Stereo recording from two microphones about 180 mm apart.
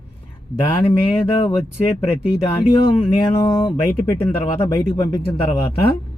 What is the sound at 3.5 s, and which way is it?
Speech, 30° left (ahead or behind).